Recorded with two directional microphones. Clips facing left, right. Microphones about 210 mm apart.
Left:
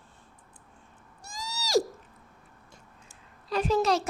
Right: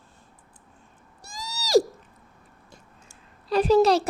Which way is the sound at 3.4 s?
35° right (ahead or behind).